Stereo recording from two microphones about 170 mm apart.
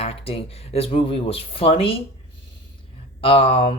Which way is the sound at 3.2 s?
35° left (ahead or behind).